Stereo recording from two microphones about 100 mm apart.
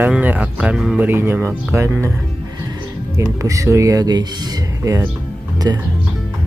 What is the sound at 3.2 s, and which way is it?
Speech, 30° right (ahead or behind).